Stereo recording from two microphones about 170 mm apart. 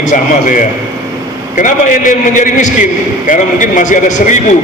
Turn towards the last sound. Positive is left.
turn(degrees=45)  # may be behind; listen again after turning